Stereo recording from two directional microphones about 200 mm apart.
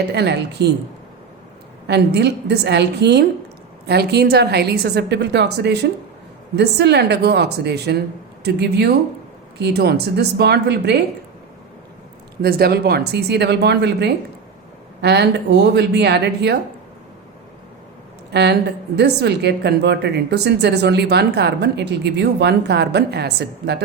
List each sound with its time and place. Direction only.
0.1 s a woman's voice: 55° right (ahead or behind)
1.9 s a woman's voice: 55° right (ahead or behind)
12.4 s a woman's voice: 50° right (ahead or behind)
18.3 s a woman's voice: 55° right (ahead or behind)